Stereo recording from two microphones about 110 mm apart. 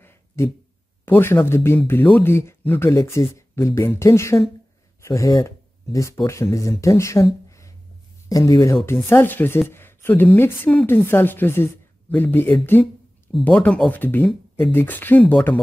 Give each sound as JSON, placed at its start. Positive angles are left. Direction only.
{"t": 0.3, "sound": "speech", "side_deg": 25}